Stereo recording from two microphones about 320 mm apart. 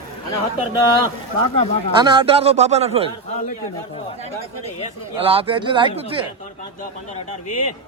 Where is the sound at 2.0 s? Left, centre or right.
Centre.